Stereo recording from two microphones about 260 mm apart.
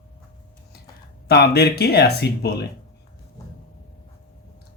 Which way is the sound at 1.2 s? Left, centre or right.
Left.